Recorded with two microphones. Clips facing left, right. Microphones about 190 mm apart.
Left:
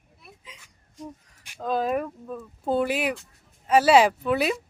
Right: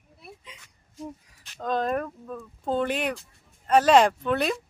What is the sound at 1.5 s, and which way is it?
A man's voice, 5° left (ahead or behind).